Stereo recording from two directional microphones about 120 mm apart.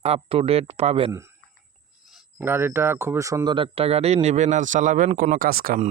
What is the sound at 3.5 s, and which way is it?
Speech, 50° right (ahead or behind).